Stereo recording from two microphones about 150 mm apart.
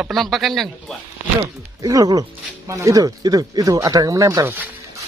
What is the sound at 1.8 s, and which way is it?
Speech, 25° right (ahead or behind).